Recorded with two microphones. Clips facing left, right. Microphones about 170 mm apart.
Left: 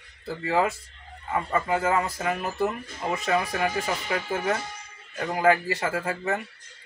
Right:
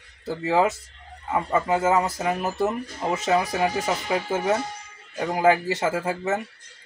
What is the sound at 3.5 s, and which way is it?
Speech, 20° right (ahead or behind).